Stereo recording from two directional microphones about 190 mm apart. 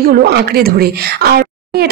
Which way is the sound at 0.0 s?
55° right (ahead or behind).